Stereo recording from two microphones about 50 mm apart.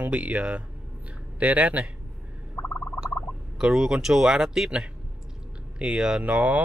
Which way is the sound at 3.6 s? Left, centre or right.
Centre.